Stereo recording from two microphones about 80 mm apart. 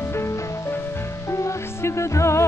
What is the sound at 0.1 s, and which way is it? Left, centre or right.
Music, left.